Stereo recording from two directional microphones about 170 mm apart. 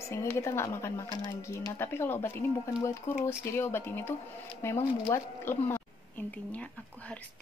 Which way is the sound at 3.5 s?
15° left (ahead or behind).